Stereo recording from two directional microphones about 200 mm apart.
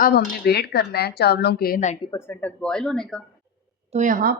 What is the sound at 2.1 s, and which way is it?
Speech, 10° left (ahead or behind).